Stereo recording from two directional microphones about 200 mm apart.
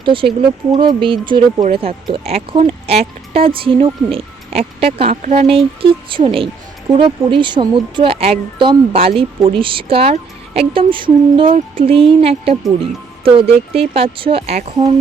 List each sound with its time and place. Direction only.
0.0 s speech: 25° right (ahead or behind)